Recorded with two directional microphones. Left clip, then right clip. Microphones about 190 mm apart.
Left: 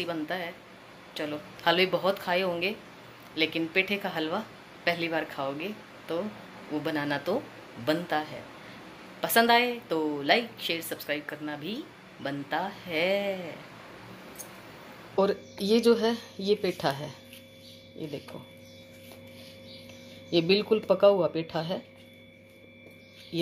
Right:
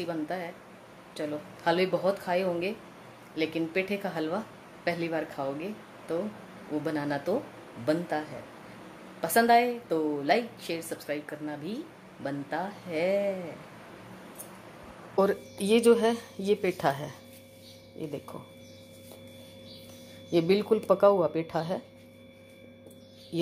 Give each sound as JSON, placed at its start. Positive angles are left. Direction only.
{"t": 0.0, "sound": "a woman's voice", "side_deg": -10}
{"t": 15.1, "sound": "a woman's voice", "side_deg": 0}
{"t": 20.2, "sound": "speech", "side_deg": 0}